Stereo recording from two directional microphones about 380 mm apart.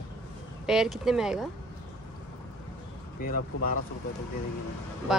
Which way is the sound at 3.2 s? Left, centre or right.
Left.